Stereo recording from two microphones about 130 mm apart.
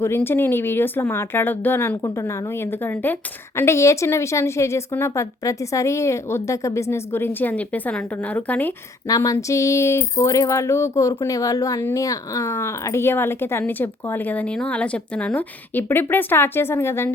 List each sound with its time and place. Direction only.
0.0 s a woman's voice: 20° left (ahead or behind)
9.0 s a woman's voice: 30° left (ahead or behind)